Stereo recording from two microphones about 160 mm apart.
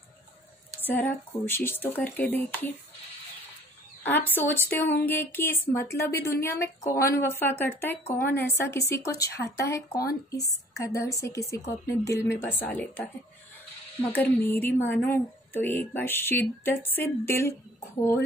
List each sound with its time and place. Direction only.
0.7 s a woman's voice: 10° left (ahead or behind)
4.0 s a woman's voice: 10° left (ahead or behind)
14.1 s a woman's voice: 10° left (ahead or behind)